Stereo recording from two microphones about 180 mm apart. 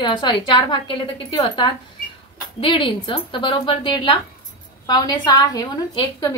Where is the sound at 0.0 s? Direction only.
25° left (ahead or behind).